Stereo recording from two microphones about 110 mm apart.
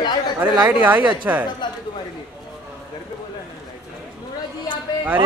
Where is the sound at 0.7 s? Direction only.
15° right (ahead or behind).